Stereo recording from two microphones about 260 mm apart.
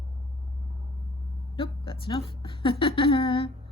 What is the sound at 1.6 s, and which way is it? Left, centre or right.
Speech, centre.